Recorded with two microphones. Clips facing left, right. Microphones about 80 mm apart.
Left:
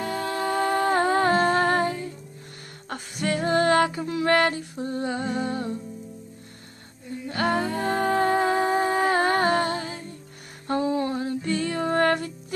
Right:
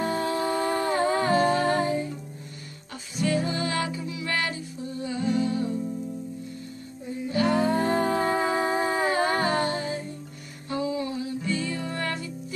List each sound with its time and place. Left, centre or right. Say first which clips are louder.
0.0 s a capella: right 2 dB; right
0.3 s humming: left 1 dB; left
2.9 s music: even; left
7.2 s music: right 2 dB; left